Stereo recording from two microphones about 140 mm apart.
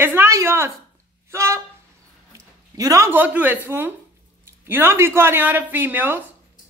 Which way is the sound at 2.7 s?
25° right (ahead or behind).